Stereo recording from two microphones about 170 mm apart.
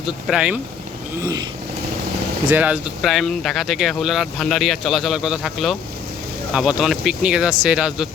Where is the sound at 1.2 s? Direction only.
20° right (ahead or behind).